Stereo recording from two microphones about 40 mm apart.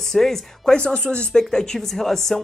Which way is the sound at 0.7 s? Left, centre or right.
Left.